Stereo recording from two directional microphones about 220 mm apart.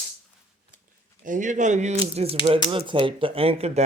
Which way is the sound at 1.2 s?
35° right (ahead or behind).